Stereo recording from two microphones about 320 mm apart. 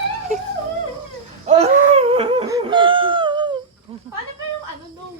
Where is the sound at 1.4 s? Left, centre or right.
Centre.